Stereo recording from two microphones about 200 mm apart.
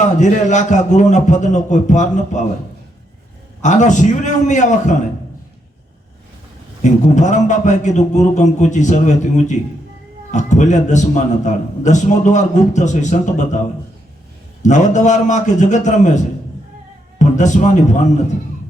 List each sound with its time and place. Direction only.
0.0 s a man's voice: 35° left (ahead or behind)
3.6 s a man's voice: 40° left (ahead or behind)
6.8 s a man's voice: 35° left (ahead or behind)
14.6 s a man's voice: 35° left (ahead or behind)